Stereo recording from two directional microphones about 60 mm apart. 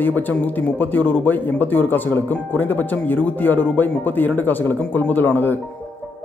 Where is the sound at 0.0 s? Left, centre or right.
Left.